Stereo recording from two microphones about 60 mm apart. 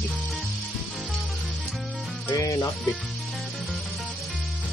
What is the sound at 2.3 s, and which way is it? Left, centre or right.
Music, left.